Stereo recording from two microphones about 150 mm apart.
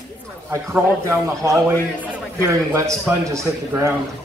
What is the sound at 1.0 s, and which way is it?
A man's voice, 20° right (ahead or behind).